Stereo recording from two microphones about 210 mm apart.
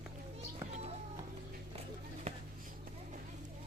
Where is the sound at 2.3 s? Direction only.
30° right (ahead or behind).